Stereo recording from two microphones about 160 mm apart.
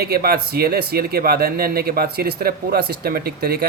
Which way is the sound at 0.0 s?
75° right (ahead or behind).